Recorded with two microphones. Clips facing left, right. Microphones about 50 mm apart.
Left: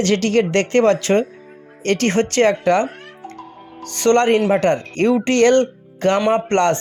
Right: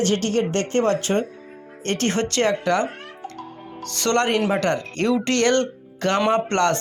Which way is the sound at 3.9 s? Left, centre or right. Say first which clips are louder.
Left 6 dB; left.